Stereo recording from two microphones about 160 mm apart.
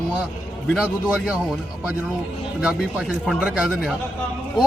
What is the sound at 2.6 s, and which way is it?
Speech, 5° right (ahead or behind).